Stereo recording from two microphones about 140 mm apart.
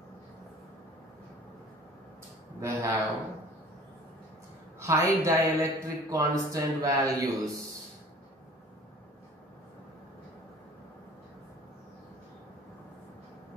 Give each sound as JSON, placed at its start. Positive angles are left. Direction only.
{"t": 2.6, "sound": "a woman's voice", "side_deg": -20}
{"t": 4.7, "sound": "a woman's voice", "side_deg": -20}